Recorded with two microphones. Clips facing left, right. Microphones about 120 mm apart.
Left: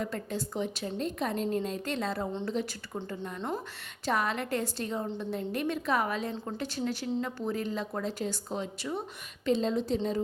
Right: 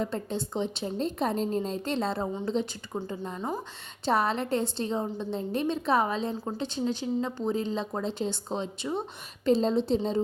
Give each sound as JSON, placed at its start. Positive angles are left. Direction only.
{"t": 0.0, "sound": "speech", "side_deg": -25}
{"t": 9.5, "sound": "a woman's voice", "side_deg": -35}